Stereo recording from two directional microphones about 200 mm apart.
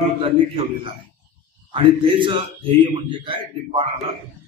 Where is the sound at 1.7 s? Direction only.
25° right (ahead or behind).